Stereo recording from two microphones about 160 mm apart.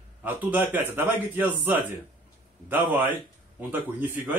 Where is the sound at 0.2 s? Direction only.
10° right (ahead or behind).